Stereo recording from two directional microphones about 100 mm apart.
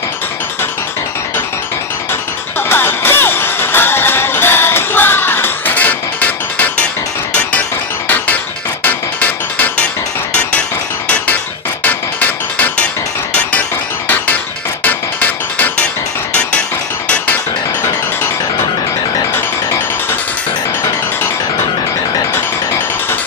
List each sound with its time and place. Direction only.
2.7 s music: 20° left (ahead or behind)
8.8 s music: 15° left (ahead or behind)
11.8 s music: 15° left (ahead or behind)
14.8 s music: 15° left (ahead or behind)